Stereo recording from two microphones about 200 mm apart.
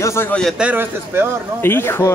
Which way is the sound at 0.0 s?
10° left (ahead or behind).